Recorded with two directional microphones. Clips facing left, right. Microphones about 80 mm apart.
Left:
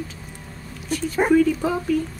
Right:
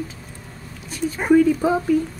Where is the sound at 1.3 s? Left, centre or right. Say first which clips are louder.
Right 4 dB; centre.